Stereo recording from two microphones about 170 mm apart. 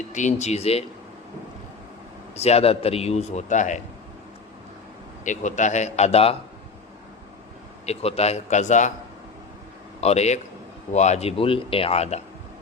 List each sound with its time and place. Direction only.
0.1 s a man's voice: 45° left (ahead or behind)
2.3 s a man's voice: 40° left (ahead or behind)
5.2 s a man's voice: 45° left (ahead or behind)
7.9 s a man's voice: 35° left (ahead or behind)
10.0 s a man's voice: 40° left (ahead or behind)